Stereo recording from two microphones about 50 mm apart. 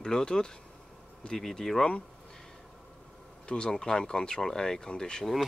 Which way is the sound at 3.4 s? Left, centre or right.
Centre.